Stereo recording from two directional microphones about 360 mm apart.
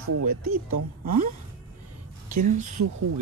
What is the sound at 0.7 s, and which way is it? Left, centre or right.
Speech, right.